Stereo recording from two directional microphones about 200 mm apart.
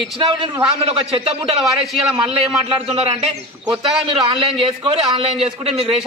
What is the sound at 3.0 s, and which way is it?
Speech, 30° right (ahead or behind).